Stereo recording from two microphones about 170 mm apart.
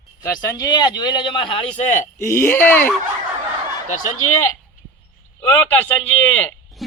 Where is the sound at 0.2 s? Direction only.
20° left (ahead or behind); by 2.0 s 45° left (ahead or behind).